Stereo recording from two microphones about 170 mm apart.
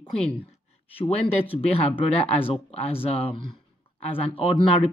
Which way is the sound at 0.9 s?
30° left (ahead or behind).